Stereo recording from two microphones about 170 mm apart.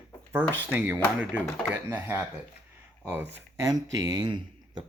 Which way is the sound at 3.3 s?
15° right (ahead or behind).